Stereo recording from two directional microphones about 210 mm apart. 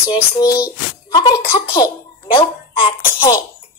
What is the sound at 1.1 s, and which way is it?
A child's voice, 20° left (ahead or behind).